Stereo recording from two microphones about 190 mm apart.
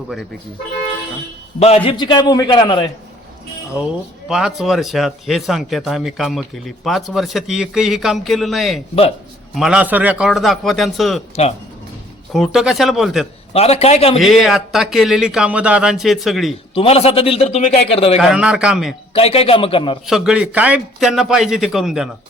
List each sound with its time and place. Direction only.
1.5 s a man's voice: 30° left (ahead or behind)
4.3 s speech: 5° right (ahead or behind)
12.3 s speech: centre (ahead or behind)
13.5 s a man's voice: 30° left (ahead or behind)
14.2 s speech: centre (ahead or behind)
16.7 s a man's voice: 30° left (ahead or behind)
18.2 s speech: 5° right (ahead or behind)
19.1 s a man's voice: 30° left (ahead or behind)
20.1 s speech: centre (ahead or behind)